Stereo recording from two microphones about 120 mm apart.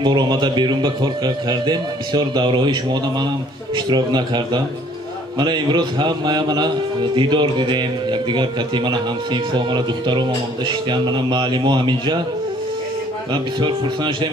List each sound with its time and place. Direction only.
0.0 s a man's voice: 35° right (ahead or behind)
13.3 s a man's voice: 40° right (ahead or behind)